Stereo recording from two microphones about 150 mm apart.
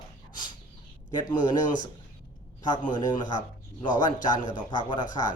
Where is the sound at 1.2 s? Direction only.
25° left (ahead or behind).